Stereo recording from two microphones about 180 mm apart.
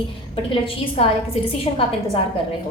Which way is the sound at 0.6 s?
30° left (ahead or behind).